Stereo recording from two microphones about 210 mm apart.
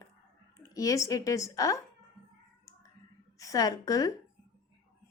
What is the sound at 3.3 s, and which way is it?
Speech, 15° left (ahead or behind).